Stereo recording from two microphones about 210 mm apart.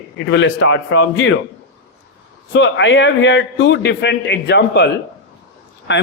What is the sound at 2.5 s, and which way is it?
A man's voice, 60° left (ahead or behind).